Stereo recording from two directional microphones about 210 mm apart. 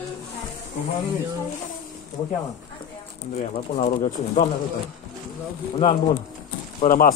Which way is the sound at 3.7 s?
35° left (ahead or behind).